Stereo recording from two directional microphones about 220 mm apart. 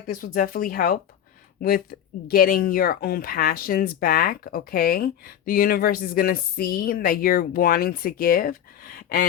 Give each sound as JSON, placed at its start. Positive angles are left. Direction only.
{"t": 0.1, "sound": "speech", "side_deg": 40}
{"t": 2.2, "sound": "speech", "side_deg": 40}